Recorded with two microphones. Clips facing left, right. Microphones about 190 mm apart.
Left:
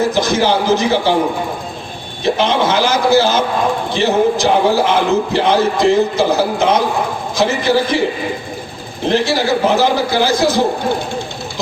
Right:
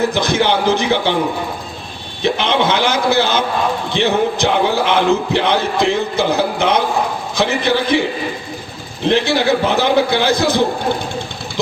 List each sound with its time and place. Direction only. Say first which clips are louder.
0.1 s a man's voice: left 1 dB; 60° right (ahead or behind)
2.2 s a man's voice: left 1 dB; 60° right (ahead or behind)
9.0 s a man's voice: even; 60° right (ahead or behind)